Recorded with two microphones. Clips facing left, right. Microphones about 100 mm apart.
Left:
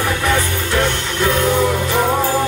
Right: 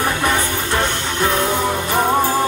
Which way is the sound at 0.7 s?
25° right (ahead or behind).